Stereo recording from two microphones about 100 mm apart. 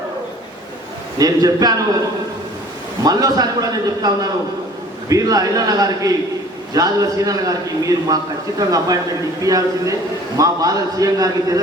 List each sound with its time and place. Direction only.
1.2 s a man's voice: 40° right (ahead or behind)
3.0 s a man's voice: 40° right (ahead or behind)